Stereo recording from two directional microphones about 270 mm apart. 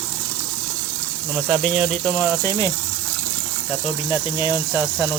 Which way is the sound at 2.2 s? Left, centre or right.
Centre.